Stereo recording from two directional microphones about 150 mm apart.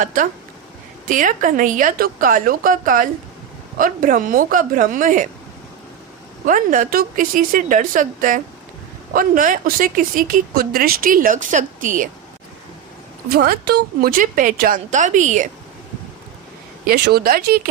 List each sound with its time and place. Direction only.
0.0 s a woman's voice: 65° right (ahead or behind)
6.4 s a woman's voice: 65° right (ahead or behind)
13.3 s a woman's voice: 90° right; by 15.4 s 55° right (ahead or behind)
16.8 s speech: 90° right